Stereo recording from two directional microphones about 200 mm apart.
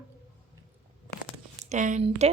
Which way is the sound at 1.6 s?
40° right (ahead or behind).